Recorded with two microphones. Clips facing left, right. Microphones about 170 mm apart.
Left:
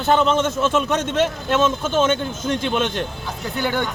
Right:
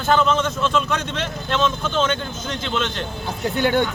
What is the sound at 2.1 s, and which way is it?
Speech, 10° left (ahead or behind).